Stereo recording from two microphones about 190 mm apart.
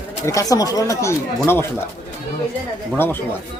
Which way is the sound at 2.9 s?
10° left (ahead or behind).